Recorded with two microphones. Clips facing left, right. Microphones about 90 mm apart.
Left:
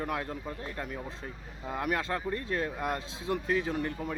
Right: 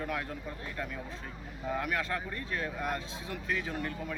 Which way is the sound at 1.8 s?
35° left (ahead or behind).